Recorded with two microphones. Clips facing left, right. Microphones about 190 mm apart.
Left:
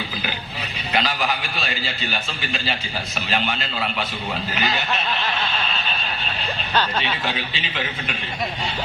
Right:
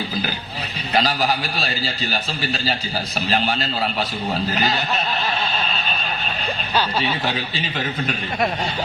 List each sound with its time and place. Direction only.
0.9 s a man's voice: 35° right (ahead or behind)
7.5 s a man's voice: 40° right (ahead or behind)